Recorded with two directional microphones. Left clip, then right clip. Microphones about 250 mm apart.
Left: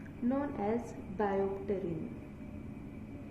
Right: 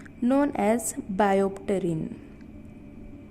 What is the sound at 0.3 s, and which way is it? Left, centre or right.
A woman's voice, right.